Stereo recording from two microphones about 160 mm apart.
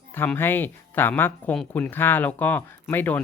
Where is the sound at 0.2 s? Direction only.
15° left (ahead or behind).